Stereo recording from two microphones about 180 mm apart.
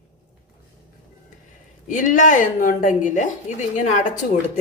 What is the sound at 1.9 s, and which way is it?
A woman's voice, 45° left (ahead or behind).